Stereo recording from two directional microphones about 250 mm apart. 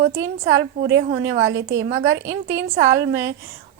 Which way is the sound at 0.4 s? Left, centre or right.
Right.